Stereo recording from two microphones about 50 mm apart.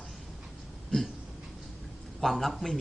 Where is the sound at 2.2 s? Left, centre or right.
Centre.